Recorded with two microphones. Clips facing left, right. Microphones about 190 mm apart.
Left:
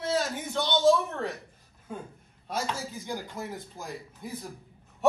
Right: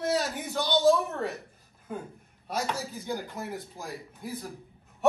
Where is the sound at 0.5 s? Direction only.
5° right (ahead or behind).